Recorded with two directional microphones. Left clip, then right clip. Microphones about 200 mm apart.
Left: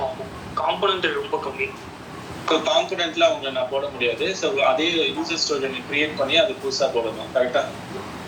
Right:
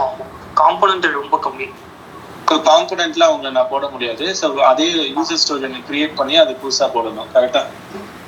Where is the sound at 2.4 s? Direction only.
40° right (ahead or behind).